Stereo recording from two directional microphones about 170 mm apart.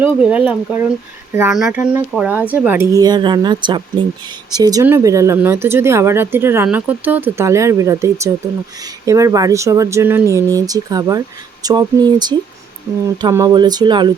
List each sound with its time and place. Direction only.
0.0 s speech: 10° right (ahead or behind); by 14.1 s 25° right (ahead or behind)